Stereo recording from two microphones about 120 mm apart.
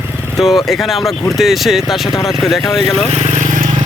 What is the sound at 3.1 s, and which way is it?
Vehicle, 75° right (ahead or behind).